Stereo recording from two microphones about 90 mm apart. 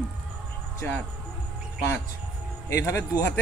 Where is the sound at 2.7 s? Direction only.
30° left (ahead or behind).